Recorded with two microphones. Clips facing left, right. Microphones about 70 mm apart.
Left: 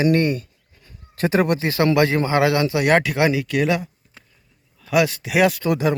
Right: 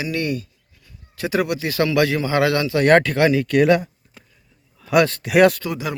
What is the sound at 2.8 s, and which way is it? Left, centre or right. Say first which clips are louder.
Speech: right 5 dB; centre.